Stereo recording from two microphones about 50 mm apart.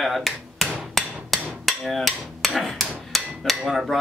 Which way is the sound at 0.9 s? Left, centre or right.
Centre.